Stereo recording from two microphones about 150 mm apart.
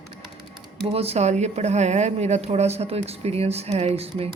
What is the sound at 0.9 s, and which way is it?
Speech, 45° right (ahead or behind).